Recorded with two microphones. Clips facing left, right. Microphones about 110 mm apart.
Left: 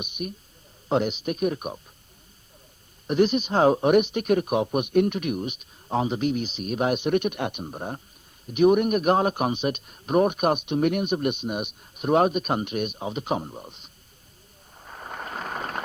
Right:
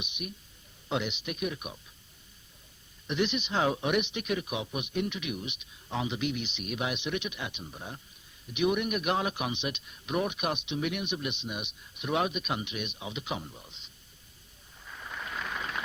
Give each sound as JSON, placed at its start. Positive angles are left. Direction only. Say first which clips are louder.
{"t": 0.0, "sound": "speech", "louder": "left 7 dB", "side_deg": 45}
{"t": 3.1, "sound": "speech", "louder": "left 9 dB", "side_deg": 45}
{"t": 14.8, "sound": "a sound", "louder": "left 5 dB", "side_deg": 45}